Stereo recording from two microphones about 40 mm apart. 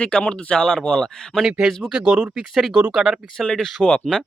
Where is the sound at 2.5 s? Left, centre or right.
Centre.